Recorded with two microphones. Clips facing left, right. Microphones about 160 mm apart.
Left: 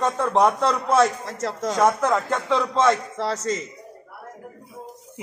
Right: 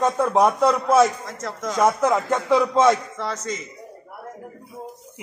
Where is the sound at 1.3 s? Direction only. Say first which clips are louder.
Left 3 dB; 35° left (ahead or behind).